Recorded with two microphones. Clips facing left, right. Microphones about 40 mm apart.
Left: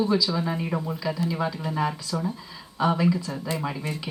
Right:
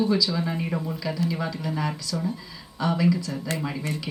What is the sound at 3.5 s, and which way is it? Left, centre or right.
Speech, centre.